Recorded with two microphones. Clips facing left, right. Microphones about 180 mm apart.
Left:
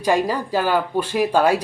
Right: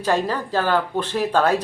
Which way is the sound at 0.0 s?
10° left (ahead or behind).